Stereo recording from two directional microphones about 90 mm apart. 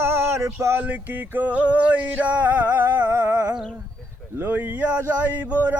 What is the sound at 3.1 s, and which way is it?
Speech, 25° right (ahead or behind).